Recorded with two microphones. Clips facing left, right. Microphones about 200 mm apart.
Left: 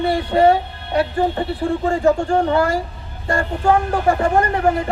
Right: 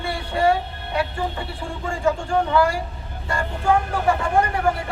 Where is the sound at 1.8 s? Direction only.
45° left (ahead or behind).